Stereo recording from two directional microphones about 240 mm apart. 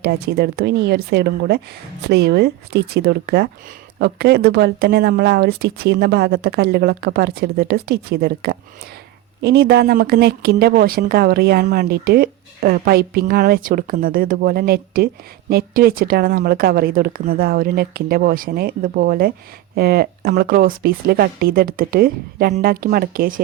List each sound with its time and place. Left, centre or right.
0.0 s speech: right